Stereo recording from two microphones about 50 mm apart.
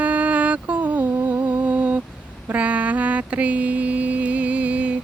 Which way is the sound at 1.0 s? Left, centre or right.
Right.